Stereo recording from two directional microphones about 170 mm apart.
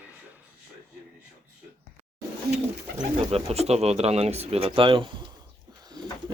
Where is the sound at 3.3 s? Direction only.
35° right (ahead or behind).